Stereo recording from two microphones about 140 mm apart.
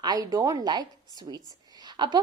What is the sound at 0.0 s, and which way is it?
A woman's voice, 30° right (ahead or behind).